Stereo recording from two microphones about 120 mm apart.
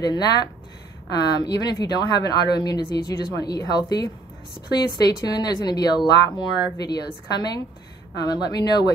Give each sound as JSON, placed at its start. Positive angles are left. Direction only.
{"t": 0.0, "sound": "a woman's voice", "side_deg": 35}